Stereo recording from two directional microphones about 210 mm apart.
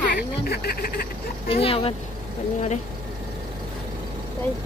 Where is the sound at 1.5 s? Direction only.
25° left (ahead or behind).